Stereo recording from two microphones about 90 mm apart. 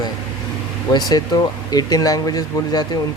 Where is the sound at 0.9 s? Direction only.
50° left (ahead or behind).